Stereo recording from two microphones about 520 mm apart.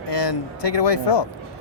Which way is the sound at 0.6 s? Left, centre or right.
Left.